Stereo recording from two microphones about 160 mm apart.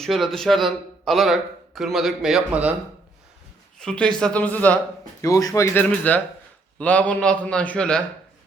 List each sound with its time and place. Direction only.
0.0 s speech: centre (ahead or behind)
3.8 s a man's voice: 5° left (ahead or behind)
5.2 s a man's voice: 20° left (ahead or behind); by 8.0 s 5° left (ahead or behind)